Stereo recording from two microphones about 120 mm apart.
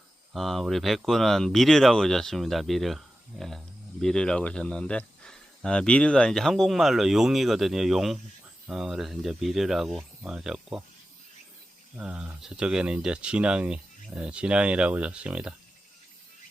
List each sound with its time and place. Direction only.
0.3 s speech: centre (ahead or behind)
11.9 s speech: 10° right (ahead or behind)